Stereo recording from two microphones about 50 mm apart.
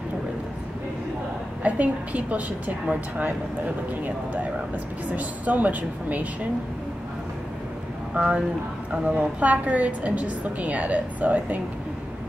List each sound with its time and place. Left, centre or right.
1.6 s a woman's voice: right
5.0 s a woman's voice: right
8.2 s a woman's voice: right